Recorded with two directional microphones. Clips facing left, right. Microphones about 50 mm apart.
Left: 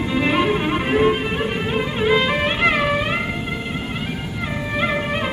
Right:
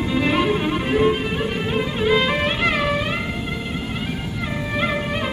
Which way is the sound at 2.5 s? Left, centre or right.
Left.